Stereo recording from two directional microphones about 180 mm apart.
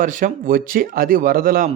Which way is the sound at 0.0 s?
50° right (ahead or behind).